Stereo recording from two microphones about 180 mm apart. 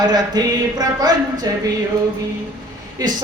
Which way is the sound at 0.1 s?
20° right (ahead or behind).